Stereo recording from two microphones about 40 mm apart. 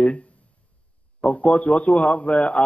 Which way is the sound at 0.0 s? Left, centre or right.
Left.